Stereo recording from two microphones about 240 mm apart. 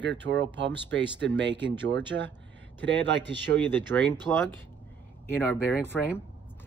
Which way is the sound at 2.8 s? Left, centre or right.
Right.